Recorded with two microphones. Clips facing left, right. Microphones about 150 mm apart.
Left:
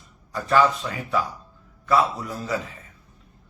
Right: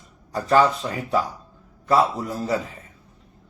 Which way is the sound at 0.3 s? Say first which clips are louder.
Right 2 dB; 35° right (ahead or behind).